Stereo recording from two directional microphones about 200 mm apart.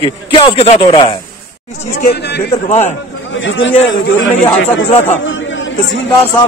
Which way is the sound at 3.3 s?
70° left (ahead or behind).